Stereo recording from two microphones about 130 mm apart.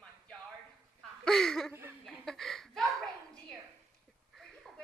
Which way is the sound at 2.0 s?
5° left (ahead or behind).